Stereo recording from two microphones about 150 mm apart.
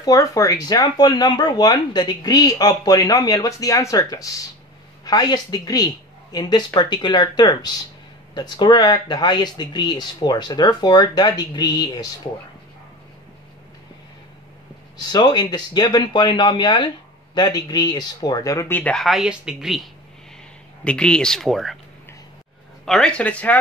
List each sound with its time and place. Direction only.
0.0 s speech: 25° left (ahead or behind)
15.0 s speech: 25° left (ahead or behind); by 19.8 s 5° right (ahead or behind)
20.8 s speech: 5° left (ahead or behind)
22.8 s speech: 5° left (ahead or behind)